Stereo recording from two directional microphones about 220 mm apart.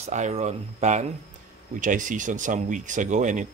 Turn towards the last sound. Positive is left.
turn(degrees=-35)  # may be behind; listen again after turning